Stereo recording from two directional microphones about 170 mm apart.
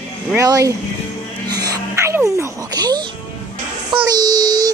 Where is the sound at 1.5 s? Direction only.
20° right (ahead or behind).